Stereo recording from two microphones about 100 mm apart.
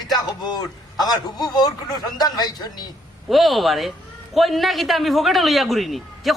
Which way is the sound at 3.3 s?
Centre (ahead or behind).